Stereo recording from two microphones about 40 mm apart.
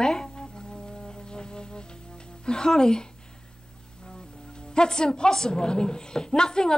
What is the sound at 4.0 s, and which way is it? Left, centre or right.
A woman's voice, left.